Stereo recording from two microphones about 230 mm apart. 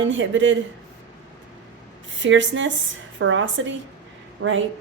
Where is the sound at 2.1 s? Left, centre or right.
Right.